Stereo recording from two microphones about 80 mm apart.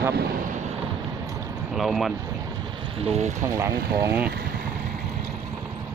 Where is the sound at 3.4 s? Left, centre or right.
Right.